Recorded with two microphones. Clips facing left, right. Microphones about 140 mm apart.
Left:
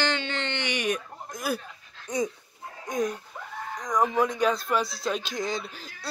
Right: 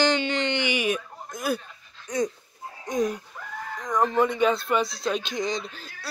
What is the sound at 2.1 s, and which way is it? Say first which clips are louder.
Speech: right 2 dB; 25° left (ahead or behind).